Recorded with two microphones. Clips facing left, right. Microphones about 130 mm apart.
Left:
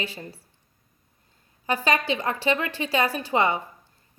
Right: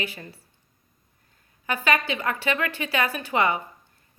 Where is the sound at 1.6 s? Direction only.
35° left (ahead or behind).